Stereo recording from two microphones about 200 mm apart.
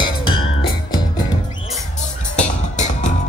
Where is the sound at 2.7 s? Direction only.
35° left (ahead or behind).